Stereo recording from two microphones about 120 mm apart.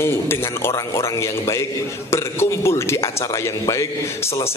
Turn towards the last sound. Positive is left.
turn(degrees=25)  # may be behind; listen again after turning